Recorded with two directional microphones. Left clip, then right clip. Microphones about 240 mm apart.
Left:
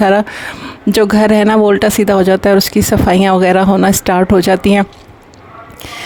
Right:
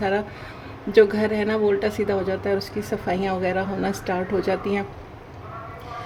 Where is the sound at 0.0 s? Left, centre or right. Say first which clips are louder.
Left 13 dB; left.